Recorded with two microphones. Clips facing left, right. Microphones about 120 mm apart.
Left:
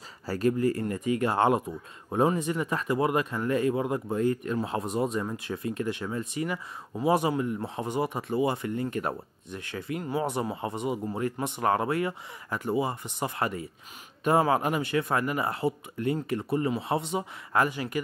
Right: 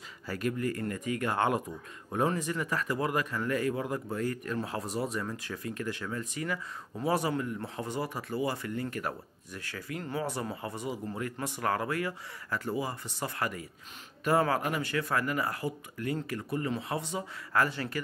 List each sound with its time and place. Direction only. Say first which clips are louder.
0.3 s speech: left 7 dB; 30° left (ahead or behind); by 18.0 s 15° left (ahead or behind)